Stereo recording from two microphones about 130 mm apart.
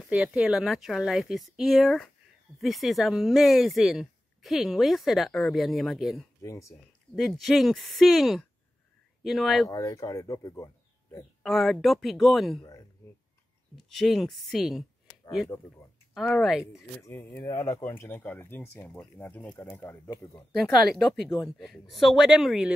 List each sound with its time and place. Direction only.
0.0 s speech: 5° right (ahead or behind)
6.4 s speech: 25° left (ahead or behind)
7.2 s speech: centre (ahead or behind)
9.7 s speech: 25° left (ahead or behind)
11.4 s speech: centre (ahead or behind)
13.7 s speech: centre (ahead or behind)
16.2 s speech: centre (ahead or behind)
17.0 s speech: 15° left (ahead or behind)
20.5 s speech: 5° left (ahead or behind)